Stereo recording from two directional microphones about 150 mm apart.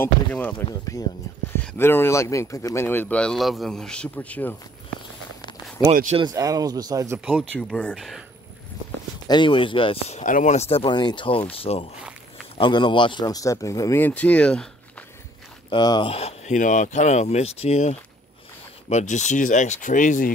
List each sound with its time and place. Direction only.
0.0 s speech: 10° left (ahead or behind)
0.7 s speech: 25° left (ahead or behind)
6.2 s speech: 25° right (ahead or behind)
7.2 s speech: 10° right (ahead or behind)
7.5 s speech: 5° left (ahead or behind)
9.3 s speech: 35° left (ahead or behind); by 15.0 s 5° left (ahead or behind)
15.7 s speech: 30° left (ahead or behind)
16.5 s speech: 55° left (ahead or behind)